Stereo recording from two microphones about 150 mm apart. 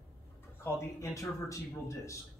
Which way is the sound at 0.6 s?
20° left (ahead or behind).